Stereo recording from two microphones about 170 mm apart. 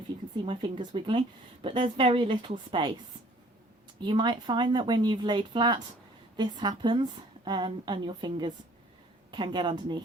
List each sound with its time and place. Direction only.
0.4 s a woman's voice: 30° right (ahead or behind)
4.0 s a woman's voice: 25° right (ahead or behind)